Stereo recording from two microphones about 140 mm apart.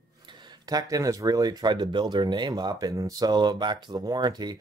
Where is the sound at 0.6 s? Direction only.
25° right (ahead or behind).